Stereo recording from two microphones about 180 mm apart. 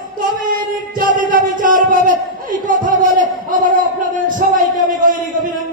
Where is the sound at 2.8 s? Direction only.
45° right (ahead or behind).